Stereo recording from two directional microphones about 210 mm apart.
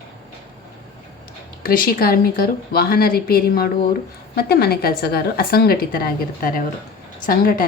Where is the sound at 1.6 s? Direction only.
45° left (ahead or behind).